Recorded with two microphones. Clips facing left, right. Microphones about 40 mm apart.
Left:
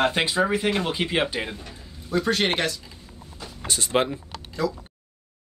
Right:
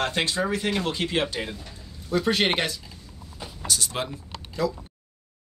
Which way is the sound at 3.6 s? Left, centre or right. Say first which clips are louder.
Left 6 dB; left.